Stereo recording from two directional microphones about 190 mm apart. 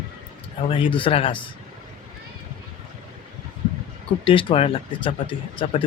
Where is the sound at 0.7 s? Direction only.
25° left (ahead or behind).